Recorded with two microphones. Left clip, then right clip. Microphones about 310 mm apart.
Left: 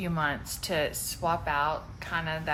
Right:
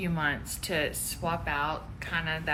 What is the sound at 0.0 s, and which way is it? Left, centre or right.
Speech, left.